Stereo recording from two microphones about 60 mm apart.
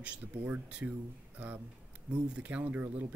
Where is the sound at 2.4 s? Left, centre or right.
Right.